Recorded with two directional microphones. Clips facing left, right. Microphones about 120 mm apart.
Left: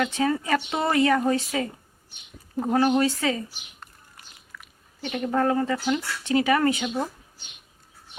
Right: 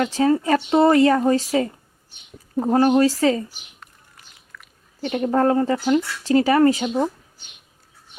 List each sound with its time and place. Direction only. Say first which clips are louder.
0.0 s speech: right 6 dB; 35° right (ahead or behind)
4.5 s chewing: right 1 dB; 5° left (ahead or behind)
4.9 s speech: right 5 dB; 35° right (ahead or behind)